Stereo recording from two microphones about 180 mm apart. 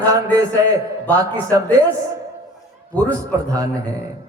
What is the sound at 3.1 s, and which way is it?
Speech, 20° right (ahead or behind).